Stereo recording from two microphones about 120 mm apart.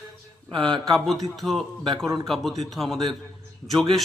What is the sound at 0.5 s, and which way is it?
Speech, 40° right (ahead or behind).